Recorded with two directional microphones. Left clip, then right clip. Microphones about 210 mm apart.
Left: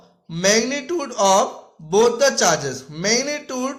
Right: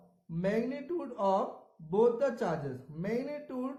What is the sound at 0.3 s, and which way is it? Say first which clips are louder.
Speech: left 15 dB; 25° left (ahead or behind).